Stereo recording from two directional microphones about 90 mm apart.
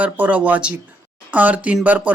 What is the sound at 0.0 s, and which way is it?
Speech, 15° right (ahead or behind).